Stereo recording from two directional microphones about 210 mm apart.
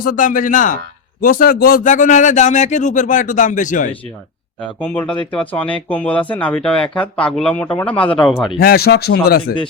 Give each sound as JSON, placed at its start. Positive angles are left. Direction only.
{"t": 0.0, "sound": "a man's voice", "side_deg": 40}
{"t": 4.8, "sound": "speech", "side_deg": 10}
{"t": 8.5, "sound": "speech", "side_deg": 45}